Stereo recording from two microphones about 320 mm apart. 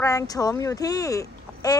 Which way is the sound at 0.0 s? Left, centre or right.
Centre.